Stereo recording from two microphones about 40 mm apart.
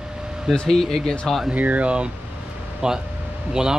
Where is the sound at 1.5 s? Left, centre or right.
Right.